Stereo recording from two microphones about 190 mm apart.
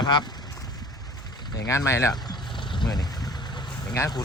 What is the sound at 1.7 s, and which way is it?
Speech, 15° left (ahead or behind).